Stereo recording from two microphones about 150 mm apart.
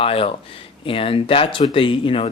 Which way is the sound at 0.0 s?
40° left (ahead or behind).